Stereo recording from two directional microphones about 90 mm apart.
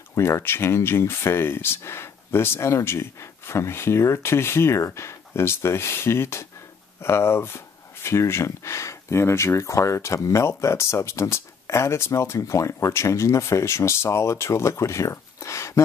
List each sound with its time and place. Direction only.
0.1 s speech: 30° left (ahead or behind)